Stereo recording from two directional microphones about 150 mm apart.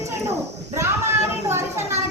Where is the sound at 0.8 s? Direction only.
15° right (ahead or behind).